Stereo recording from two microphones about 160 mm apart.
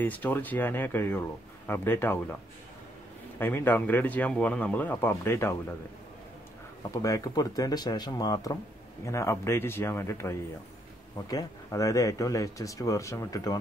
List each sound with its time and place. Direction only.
0.0 s speech: 10° left (ahead or behind)
3.3 s speech: 15° left (ahead or behind)
6.9 s speech: 20° left (ahead or behind)